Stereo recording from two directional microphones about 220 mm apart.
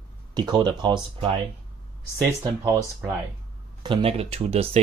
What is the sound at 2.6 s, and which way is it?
Speech, 15° right (ahead or behind).